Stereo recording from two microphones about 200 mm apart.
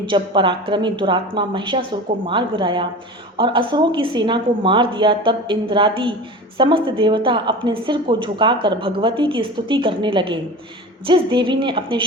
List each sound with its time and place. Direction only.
0.0 s a woman's voice: 25° right (ahead or behind)